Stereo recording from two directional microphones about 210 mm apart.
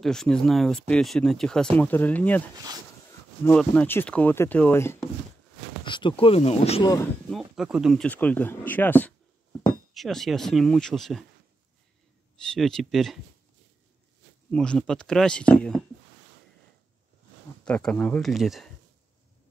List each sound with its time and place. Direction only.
0.0 s speech: centre (ahead or behind)
2.5 s speech: 20° right (ahead or behind)
3.1 s speech: 10° left (ahead or behind)
5.9 s speech: 20° left (ahead or behind)
7.2 s speech: centre (ahead or behind)
12.4 s speech: centre (ahead or behind)
14.5 s speech: 5° left (ahead or behind)
17.6 s speech: 5° left (ahead or behind)